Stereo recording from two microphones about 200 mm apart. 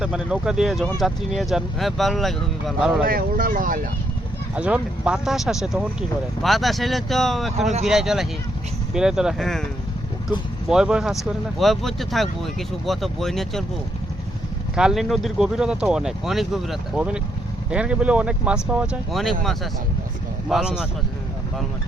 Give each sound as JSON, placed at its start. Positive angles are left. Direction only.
{"t": 0.0, "sound": "speech", "side_deg": -5}
{"t": 3.1, "sound": "speech", "side_deg": -45}
{"t": 4.5, "sound": "speech", "side_deg": -5}
{"t": 10.7, "sound": "speech", "side_deg": -5}
{"t": 14.8, "sound": "speech", "side_deg": 0}